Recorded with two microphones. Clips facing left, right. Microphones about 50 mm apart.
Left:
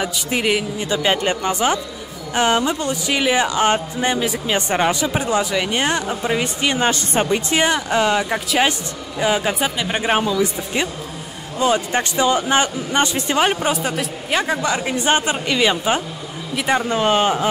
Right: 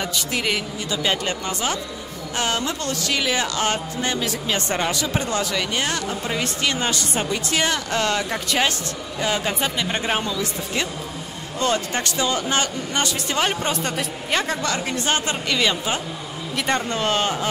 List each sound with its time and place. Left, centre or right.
0.3 s a man's voice: centre
0.7 s speech: left
7.6 s a man's voice: centre
16.5 s a man's voice: centre